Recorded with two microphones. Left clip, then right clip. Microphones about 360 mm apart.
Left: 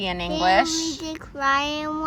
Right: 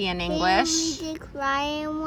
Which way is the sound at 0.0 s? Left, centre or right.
Centre.